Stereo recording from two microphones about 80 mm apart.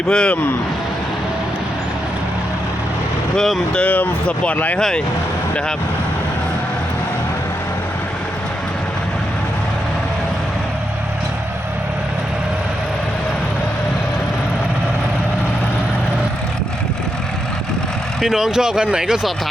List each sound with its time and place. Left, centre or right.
0.1 s speech: centre
3.3 s speech: centre
4.8 s speech: centre
18.2 s speech: centre